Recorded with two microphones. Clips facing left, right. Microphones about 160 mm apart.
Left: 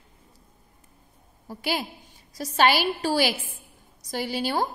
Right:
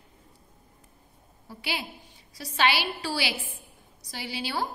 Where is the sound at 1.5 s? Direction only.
45° left (ahead or behind).